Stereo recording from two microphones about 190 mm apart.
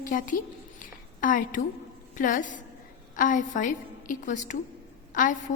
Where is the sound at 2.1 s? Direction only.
45° left (ahead or behind).